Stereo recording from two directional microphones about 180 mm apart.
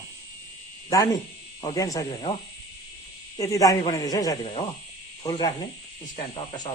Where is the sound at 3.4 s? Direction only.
20° left (ahead or behind).